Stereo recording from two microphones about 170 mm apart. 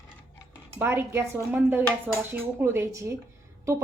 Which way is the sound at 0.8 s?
15° right (ahead or behind).